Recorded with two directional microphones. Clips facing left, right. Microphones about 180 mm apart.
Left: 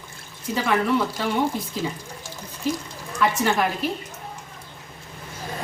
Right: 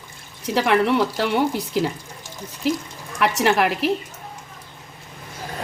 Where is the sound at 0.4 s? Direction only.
75° right (ahead or behind).